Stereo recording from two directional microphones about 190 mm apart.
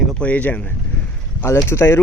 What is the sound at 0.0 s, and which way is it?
Speech, 5° left (ahead or behind).